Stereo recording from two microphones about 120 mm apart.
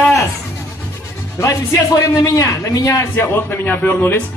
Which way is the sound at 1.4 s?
25° left (ahead or behind).